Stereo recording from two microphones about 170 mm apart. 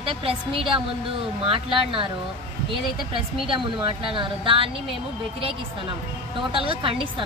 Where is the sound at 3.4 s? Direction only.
30° right (ahead or behind).